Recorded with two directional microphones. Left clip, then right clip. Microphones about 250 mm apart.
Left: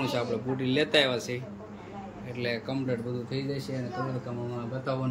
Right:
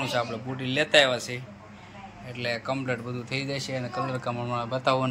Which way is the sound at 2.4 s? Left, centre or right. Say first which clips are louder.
Right 3 dB; centre.